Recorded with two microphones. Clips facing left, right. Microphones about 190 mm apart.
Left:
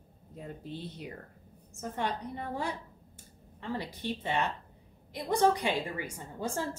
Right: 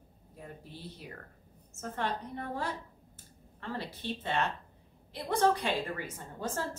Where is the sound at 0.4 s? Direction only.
20° left (ahead or behind).